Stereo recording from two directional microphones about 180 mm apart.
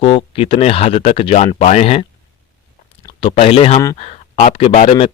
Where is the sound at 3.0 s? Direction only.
30° left (ahead or behind).